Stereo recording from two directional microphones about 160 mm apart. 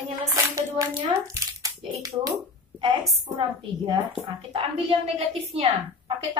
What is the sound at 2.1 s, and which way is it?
Speech, 20° right (ahead or behind).